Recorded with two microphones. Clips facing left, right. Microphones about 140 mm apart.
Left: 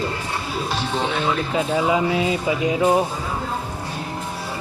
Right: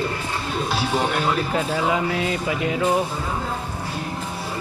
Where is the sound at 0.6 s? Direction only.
5° right (ahead or behind).